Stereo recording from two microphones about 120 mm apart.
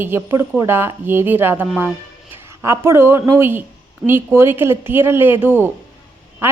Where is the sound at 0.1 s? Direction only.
20° right (ahead or behind).